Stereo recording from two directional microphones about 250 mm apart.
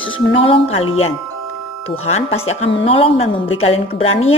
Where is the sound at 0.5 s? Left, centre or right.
Left.